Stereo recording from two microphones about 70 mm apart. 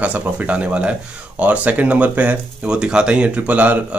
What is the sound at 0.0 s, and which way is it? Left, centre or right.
Speech, centre.